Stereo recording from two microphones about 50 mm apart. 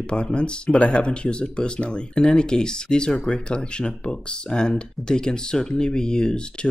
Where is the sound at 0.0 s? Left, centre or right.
Left.